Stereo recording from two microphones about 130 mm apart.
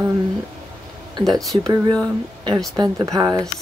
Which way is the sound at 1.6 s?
30° right (ahead or behind).